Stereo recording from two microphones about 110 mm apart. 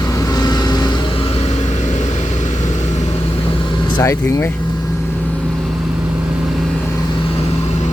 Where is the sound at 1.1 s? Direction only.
55° left (ahead or behind).